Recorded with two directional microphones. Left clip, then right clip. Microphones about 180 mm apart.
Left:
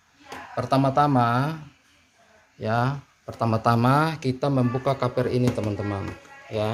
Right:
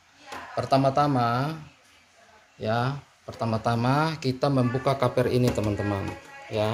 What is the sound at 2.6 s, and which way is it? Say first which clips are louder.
Speech: left 2 dB; 20° left (ahead or behind).